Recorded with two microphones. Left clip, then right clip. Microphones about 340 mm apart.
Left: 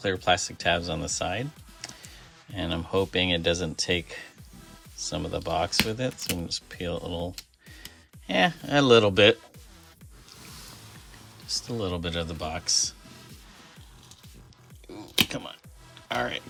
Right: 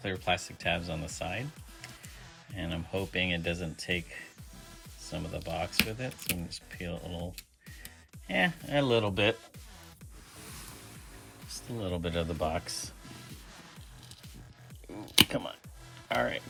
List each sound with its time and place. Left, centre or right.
0.0 s speech: centre
5.0 s speech: centre
8.3 s speech: centre
11.4 s speech: centre
15.3 s speech: centre